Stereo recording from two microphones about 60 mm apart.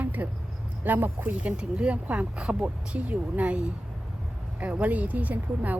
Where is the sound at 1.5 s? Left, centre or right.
Centre.